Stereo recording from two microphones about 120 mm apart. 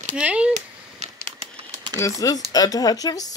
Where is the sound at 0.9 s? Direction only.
65° right (ahead or behind).